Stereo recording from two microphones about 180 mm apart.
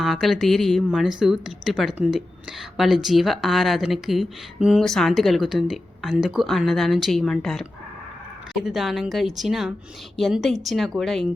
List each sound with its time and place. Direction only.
0.0 s speech: centre (ahead or behind)